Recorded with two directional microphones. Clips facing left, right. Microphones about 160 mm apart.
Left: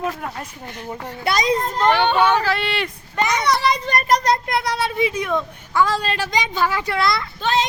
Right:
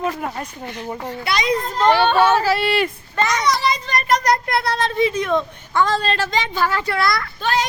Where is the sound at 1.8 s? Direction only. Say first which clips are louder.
Right 3 dB; 10° right (ahead or behind).